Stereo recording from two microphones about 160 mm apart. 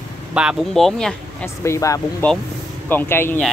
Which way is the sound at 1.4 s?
15° left (ahead or behind).